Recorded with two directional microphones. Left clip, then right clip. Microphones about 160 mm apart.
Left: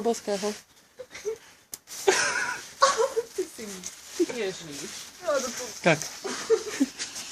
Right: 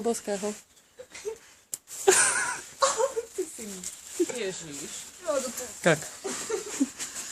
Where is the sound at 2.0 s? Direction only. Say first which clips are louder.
Right 1 dB; 30° right (ahead or behind).